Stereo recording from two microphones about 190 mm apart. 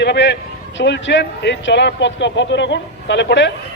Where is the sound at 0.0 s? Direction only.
65° left (ahead or behind).